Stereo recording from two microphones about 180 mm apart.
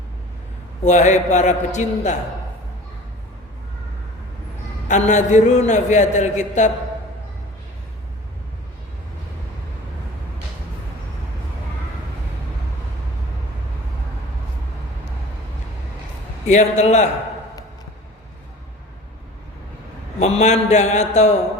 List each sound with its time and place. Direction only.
0.9 s a man's voice: 40° left (ahead or behind)
4.9 s a man's voice: 40° left (ahead or behind)
16.5 s a man's voice: 40° left (ahead or behind)
20.1 s a man's voice: 40° left (ahead or behind)